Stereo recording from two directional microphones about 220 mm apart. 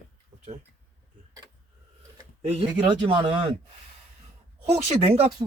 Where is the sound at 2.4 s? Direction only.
25° right (ahead or behind).